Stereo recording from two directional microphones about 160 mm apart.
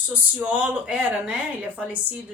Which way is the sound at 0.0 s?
10° right (ahead or behind).